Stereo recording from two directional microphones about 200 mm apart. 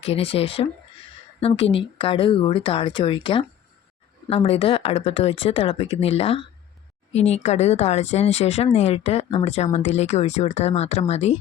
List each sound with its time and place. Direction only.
0.0 s speech: 30° left (ahead or behind)